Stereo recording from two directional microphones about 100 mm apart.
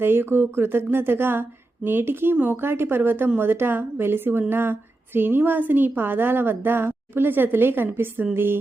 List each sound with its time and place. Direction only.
0.0 s speech: 25° right (ahead or behind)